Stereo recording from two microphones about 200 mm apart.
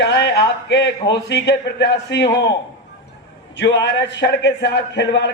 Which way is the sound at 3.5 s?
60° left (ahead or behind).